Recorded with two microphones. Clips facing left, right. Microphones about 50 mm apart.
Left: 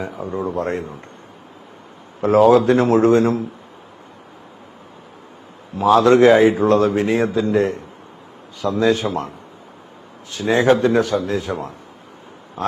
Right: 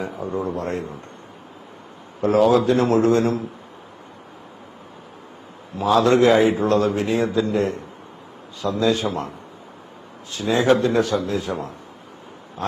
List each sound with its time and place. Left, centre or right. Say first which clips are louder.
0.2 s speech: left 3 dB; left
2.4 s a man's voice: left 4 dB; left
5.8 s a man's voice: left 4 dB; left
10.3 s a man's voice: left 2 dB; left